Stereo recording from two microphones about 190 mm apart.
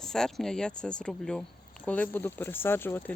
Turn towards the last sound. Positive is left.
turn(degrees=10)  # may be behind; listen again after turning